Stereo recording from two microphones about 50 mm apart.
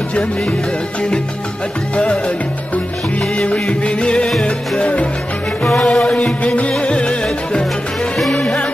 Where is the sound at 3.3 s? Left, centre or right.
Centre.